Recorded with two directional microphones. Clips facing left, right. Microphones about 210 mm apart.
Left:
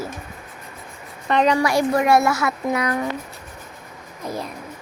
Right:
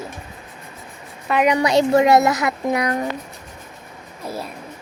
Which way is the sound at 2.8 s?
30° right (ahead or behind).